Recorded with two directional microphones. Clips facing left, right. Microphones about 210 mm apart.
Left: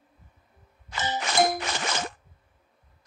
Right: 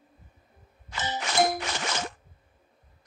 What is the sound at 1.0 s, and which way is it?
Music, 45° left (ahead or behind).